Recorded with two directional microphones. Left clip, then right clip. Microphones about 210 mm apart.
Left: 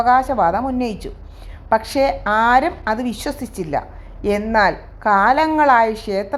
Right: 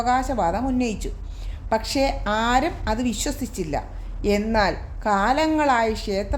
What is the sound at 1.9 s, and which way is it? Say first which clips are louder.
A woman's voice: left 6 dB; 5° left (ahead or behind).